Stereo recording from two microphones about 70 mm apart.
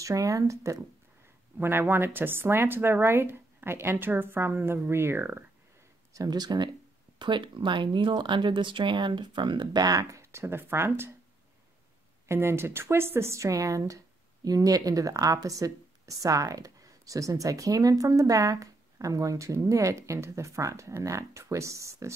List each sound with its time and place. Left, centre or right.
0.0 s speech: right
1.6 s speech: right
6.1 s speech: right
12.3 s speech: right